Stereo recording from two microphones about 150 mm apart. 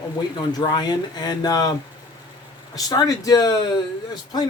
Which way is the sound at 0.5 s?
30° left (ahead or behind).